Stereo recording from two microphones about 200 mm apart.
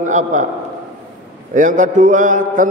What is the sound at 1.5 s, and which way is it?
A man's voice, 40° right (ahead or behind).